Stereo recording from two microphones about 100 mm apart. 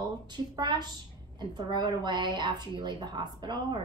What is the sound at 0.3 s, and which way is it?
A woman's voice, 45° right (ahead or behind).